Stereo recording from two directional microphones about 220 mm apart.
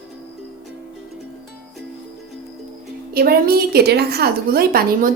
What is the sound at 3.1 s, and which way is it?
A woman's voice, 45° right (ahead or behind).